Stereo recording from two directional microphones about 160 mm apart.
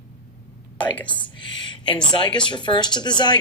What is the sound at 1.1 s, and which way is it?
Speech, 30° left (ahead or behind).